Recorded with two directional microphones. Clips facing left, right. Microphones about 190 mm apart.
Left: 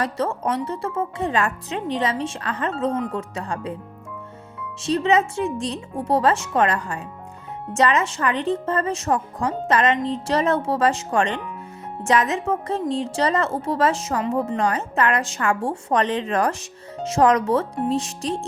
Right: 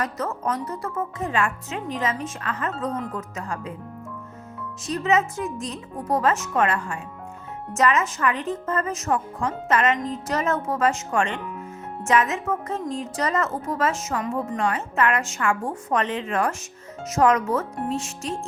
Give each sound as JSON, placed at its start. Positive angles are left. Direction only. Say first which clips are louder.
{"t": 0.0, "sound": "a woman's voice", "louder": "left 3 dB", "side_deg": 30}
{"t": 4.8, "sound": "a woman's voice", "louder": "left 3 dB", "side_deg": 30}
{"t": 14.6, "sound": "a woman's voice", "louder": "left 2 dB", "side_deg": 40}